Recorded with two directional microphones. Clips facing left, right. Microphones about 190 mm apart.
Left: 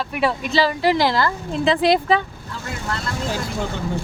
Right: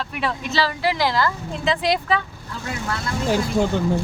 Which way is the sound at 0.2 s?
15° left (ahead or behind).